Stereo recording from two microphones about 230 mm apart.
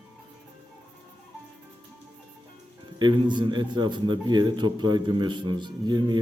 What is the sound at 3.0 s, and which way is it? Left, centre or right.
A man's voice, centre.